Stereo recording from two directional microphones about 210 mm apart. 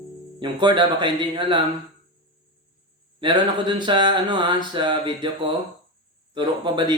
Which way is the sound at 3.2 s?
25° right (ahead or behind).